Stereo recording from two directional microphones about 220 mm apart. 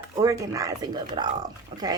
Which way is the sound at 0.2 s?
15° right (ahead or behind).